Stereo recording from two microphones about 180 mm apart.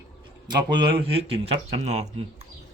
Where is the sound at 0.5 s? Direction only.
25° right (ahead or behind).